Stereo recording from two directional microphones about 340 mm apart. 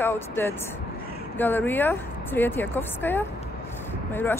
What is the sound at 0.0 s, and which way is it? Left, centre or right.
A woman's voice, centre.